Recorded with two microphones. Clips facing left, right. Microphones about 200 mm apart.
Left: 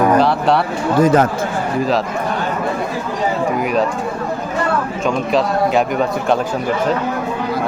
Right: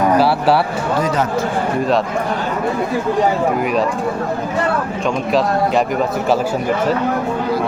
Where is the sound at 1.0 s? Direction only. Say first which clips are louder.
Left 10 dB; 50° left (ahead or behind).